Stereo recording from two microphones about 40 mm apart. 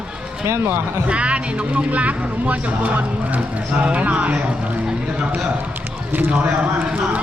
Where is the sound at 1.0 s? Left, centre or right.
Right.